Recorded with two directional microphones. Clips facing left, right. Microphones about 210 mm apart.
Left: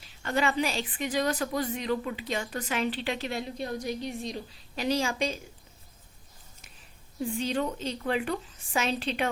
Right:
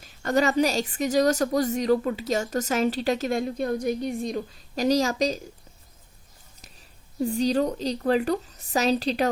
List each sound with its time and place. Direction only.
0.0 s a woman's voice: 40° right (ahead or behind)
6.6 s speech: 40° right (ahead or behind)